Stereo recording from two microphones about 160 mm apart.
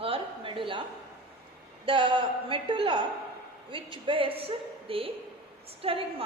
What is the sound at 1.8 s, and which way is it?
A woman's voice, 30° right (ahead or behind).